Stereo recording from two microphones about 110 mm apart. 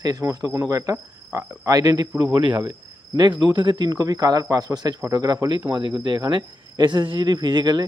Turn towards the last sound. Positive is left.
turn(degrees=-40)  # may be behind; listen again after turning